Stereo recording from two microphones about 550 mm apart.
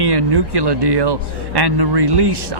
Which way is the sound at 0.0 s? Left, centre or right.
Right.